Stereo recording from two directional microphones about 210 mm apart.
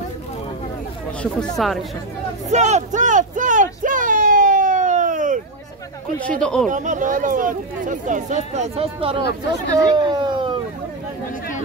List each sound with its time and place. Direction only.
1.6 s speech: centre (ahead or behind)
2.5 s a sound: 35° right (ahead or behind)
6.4 s speech: 5° left (ahead or behind)
6.7 s speech: 35° right (ahead or behind); by 10.6 s 20° right (ahead or behind)